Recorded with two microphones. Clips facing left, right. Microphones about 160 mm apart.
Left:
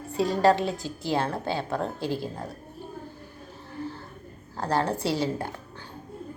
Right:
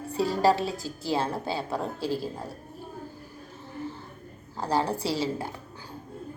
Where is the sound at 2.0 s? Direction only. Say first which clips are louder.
Even; 35° right (ahead or behind).